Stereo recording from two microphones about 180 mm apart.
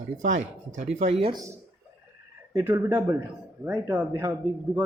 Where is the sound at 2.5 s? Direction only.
15° right (ahead or behind).